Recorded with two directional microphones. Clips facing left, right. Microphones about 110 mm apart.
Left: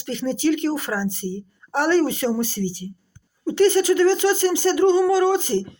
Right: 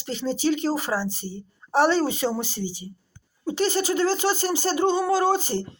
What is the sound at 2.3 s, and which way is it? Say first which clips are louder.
Speech: left 5 dB; 15° right (ahead or behind).